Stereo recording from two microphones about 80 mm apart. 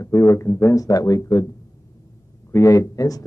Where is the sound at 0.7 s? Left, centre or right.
Left.